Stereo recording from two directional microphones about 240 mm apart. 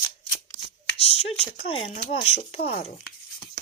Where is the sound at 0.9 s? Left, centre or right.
Left.